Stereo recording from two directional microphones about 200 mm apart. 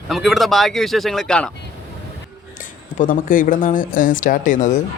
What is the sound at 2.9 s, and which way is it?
Speech, 45° left (ahead or behind).